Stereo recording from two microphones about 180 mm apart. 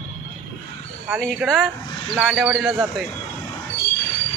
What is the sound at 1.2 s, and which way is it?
Speech, centre (ahead or behind).